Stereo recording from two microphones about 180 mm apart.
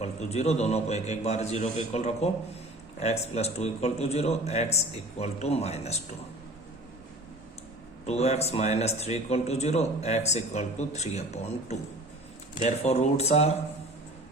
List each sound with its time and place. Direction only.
0.0 s speech: 35° left (ahead or behind)
8.0 s speech: 35° left (ahead or behind)